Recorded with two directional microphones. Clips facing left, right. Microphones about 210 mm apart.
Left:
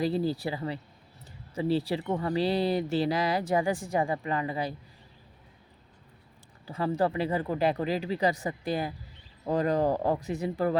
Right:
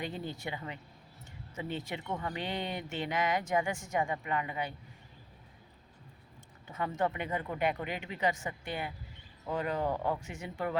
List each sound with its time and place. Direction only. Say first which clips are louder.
0.0 s speech: left 10 dB; 35° left (ahead or behind)
6.7 s speech: left 6 dB; 30° left (ahead or behind)